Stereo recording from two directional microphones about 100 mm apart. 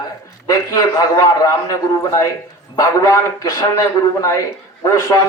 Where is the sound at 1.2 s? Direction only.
40° left (ahead or behind).